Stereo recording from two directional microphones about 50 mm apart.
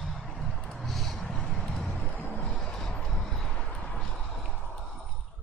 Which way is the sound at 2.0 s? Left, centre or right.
Left.